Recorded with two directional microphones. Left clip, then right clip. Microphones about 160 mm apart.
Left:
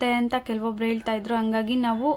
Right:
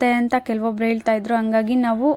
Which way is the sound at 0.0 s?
35° right (ahead or behind).